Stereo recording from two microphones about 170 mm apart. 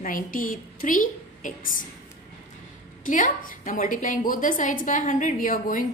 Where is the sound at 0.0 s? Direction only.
55° left (ahead or behind).